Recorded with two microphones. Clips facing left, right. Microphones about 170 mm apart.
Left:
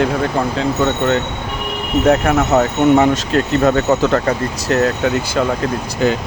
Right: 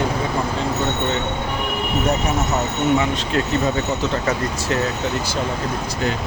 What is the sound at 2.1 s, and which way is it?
Speech, 60° left (ahead or behind).